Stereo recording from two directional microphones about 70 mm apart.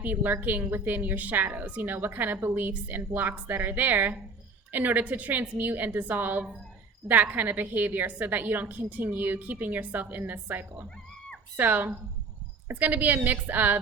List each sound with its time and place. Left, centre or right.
0.0 s a woman's voice: right